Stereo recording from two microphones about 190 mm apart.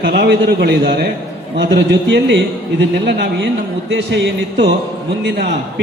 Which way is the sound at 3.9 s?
65° right (ahead or behind).